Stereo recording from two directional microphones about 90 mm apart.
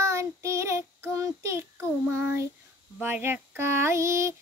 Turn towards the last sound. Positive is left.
turn(degrees=-30)  # may be behind; listen again after turning